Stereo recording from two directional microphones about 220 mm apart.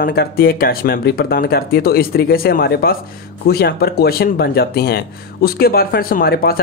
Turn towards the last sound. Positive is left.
turn(degrees=45)  # may be behind; listen again after turning